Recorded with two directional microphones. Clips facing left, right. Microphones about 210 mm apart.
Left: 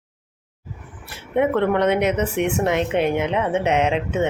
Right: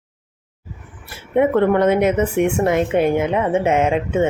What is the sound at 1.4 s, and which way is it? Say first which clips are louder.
A woman's voice: right 4 dB; 5° right (ahead or behind).